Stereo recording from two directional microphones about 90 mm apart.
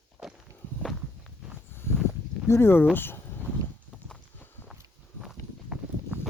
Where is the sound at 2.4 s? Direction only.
25° left (ahead or behind).